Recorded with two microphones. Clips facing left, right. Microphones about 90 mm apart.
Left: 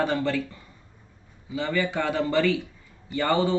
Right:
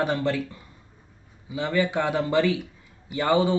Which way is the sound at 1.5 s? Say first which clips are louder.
Right 2 dB; 15° right (ahead or behind).